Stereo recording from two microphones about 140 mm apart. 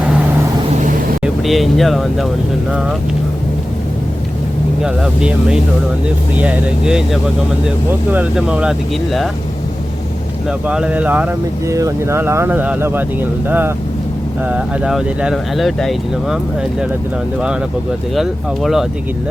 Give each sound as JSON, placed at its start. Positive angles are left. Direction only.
{"t": 1.2, "sound": "speech", "side_deg": 0}
{"t": 4.8, "sound": "speech", "side_deg": -5}
{"t": 10.7, "sound": "speech", "side_deg": -10}
{"t": 11.7, "sound": "speech", "side_deg": -25}
{"t": 18.1, "sound": "speech", "side_deg": 0}